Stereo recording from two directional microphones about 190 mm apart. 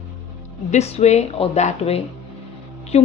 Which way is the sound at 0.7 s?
35° left (ahead or behind).